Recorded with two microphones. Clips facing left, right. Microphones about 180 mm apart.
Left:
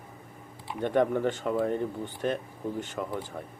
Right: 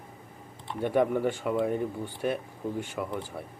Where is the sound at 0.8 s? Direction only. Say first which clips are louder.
Even; 10° right (ahead or behind).